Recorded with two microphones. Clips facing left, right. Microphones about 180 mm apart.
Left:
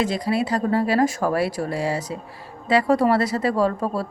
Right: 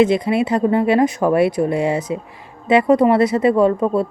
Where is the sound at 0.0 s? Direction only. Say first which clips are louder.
Right 7 dB; 20° right (ahead or behind).